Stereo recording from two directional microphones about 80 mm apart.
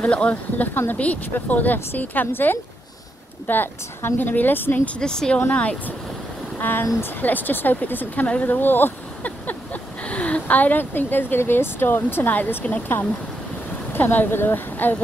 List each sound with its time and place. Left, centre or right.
0.0 s a woman's voice: centre
4.9 s a woman's voice: centre; by 15.0 s left